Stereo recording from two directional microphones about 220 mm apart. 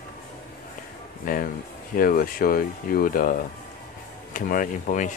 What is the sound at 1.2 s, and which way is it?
Speech, 40° left (ahead or behind).